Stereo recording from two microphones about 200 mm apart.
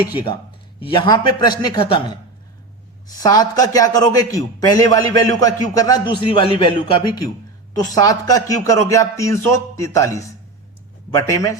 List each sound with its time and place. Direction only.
0.1 s a man's voice: 25° left (ahead or behind)
3.2 s a man's voice: 15° left (ahead or behind)